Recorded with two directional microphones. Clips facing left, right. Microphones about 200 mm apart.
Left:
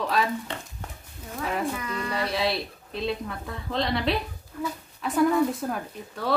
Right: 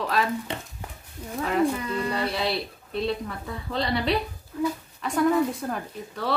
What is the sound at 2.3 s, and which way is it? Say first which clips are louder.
A woman's voice: left 1 dB; centre (ahead or behind).